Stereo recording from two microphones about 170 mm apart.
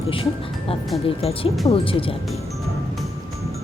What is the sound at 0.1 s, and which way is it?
Speech, 30° left (ahead or behind).